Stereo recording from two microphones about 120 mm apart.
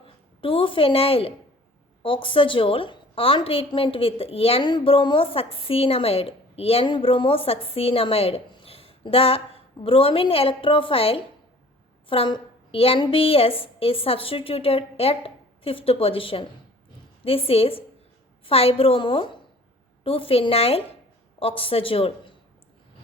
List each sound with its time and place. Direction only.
0.0 s a woman's voice: 50° left (ahead or behind)